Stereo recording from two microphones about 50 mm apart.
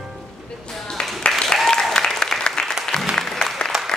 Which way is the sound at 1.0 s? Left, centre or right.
Centre.